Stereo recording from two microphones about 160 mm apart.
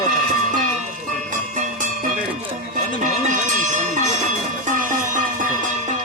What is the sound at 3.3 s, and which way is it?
Music, 50° right (ahead or behind).